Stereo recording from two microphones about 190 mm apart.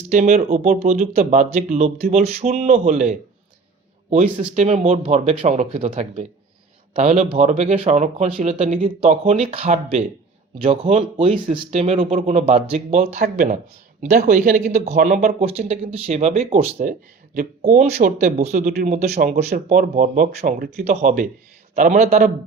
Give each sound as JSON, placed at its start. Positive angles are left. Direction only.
{"t": 0.1, "sound": "speech", "side_deg": -40}
{"t": 4.2, "sound": "speech", "side_deg": -35}
{"t": 14.8, "sound": "speech", "side_deg": -40}